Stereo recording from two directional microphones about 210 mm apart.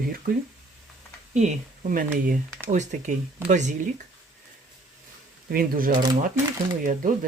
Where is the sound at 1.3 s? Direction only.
35° right (ahead or behind).